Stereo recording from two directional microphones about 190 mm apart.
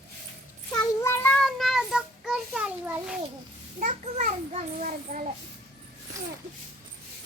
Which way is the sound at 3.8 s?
40° right (ahead or behind).